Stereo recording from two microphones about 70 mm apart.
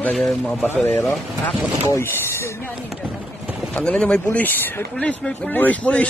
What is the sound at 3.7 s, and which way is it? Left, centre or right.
Speech, centre.